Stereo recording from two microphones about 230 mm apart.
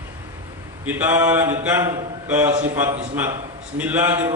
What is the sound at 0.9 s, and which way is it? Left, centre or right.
Speech, centre.